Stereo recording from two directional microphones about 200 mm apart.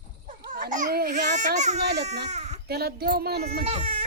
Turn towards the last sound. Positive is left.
turn(degrees=-30)  # may be behind; listen again after turning